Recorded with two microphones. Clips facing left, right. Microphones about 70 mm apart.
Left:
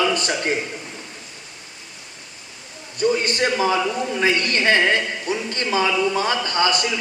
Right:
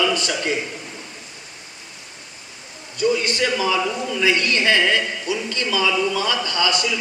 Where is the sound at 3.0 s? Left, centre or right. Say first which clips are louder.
Even; left.